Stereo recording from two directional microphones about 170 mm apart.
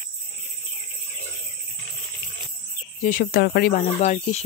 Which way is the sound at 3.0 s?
55° left (ahead or behind).